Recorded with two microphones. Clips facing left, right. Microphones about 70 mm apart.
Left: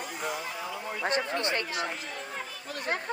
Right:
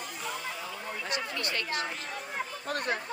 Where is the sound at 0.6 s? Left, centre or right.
Centre.